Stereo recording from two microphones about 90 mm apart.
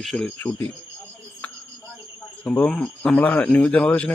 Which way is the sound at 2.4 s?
20° left (ahead or behind).